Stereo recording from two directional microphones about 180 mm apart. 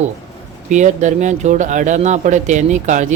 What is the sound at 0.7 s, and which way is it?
A man's voice, 40° right (ahead or behind).